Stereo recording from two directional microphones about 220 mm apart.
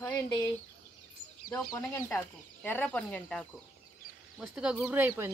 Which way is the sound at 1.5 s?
15° left (ahead or behind).